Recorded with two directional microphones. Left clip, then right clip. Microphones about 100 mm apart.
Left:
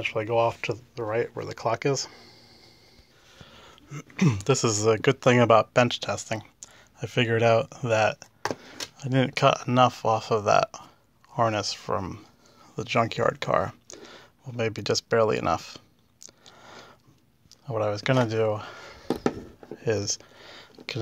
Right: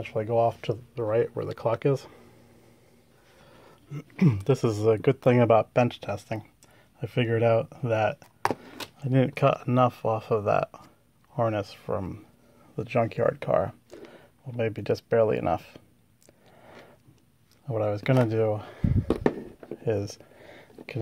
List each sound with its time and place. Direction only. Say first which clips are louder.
0.0 s speech: left 1 dB; 15° right (ahead or behind)
0.9 s speech: right 4 dB; 40° right (ahead or behind); by 2.2 s 25° right (ahead or behind)
3.4 s a sound: left 2 dB; 20° right (ahead or behind)
4.3 s speech: left 2 dB; 5° right (ahead or behind)
8.9 s speech: even; 20° right (ahead or behind); by 14.2 s centre (ahead or behind)
14.6 s a sound: left 1 dB; 5° right (ahead or behind)
17.6 s speech: left 1 dB; 25° right (ahead or behind)
19.8 s speech: left 2 dB; centre (ahead or behind)
20.3 s a sound: left 3 dB; 20° right (ahead or behind)